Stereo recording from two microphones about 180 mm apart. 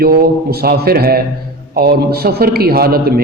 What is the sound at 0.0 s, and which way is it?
A man's voice, 55° right (ahead or behind).